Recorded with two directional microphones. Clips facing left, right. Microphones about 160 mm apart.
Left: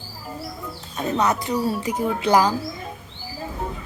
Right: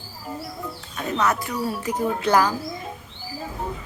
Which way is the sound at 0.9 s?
25° left (ahead or behind).